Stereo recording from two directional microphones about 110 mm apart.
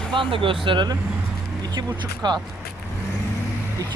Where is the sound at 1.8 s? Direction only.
25° right (ahead or behind).